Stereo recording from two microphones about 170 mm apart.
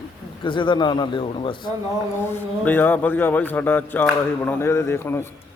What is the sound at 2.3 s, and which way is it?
Speech, 10° left (ahead or behind).